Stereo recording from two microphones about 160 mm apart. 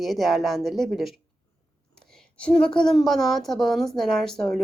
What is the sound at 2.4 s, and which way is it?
A woman's voice, 5° left (ahead or behind).